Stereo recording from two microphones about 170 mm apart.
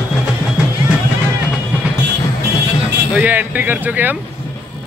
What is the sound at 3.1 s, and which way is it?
Speech, 10° right (ahead or behind).